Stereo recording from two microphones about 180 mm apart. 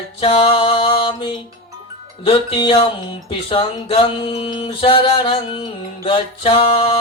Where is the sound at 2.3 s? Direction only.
30° left (ahead or behind).